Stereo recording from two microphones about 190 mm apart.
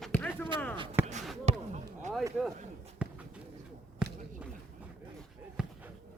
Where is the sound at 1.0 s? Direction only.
10° right (ahead or behind).